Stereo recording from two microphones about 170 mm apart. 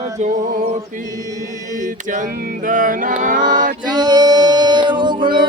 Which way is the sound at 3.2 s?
50° right (ahead or behind).